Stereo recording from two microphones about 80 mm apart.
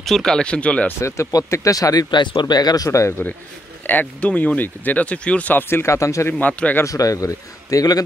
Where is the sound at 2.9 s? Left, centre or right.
Left.